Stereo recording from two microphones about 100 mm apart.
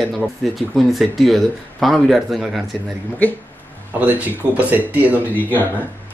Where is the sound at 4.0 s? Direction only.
15° right (ahead or behind).